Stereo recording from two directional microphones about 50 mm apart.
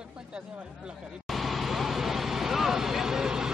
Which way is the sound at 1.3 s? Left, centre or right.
Centre.